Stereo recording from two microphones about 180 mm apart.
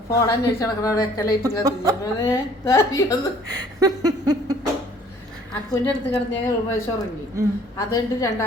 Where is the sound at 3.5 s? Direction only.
20° right (ahead or behind).